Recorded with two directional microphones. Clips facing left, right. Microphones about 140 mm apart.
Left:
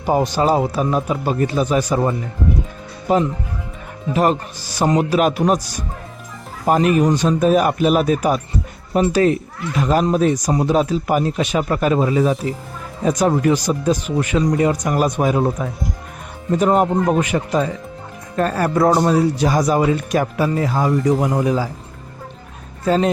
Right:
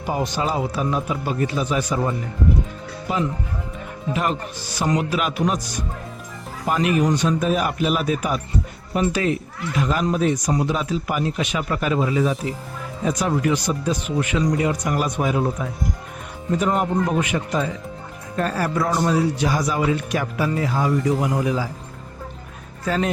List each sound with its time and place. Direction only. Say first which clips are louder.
0.1 s speech: left 7 dB; 40° left (ahead or behind)
6.7 s speech: left 5 dB; 40° left (ahead or behind)
16.6 s speech: left 5 dB; 40° left (ahead or behind)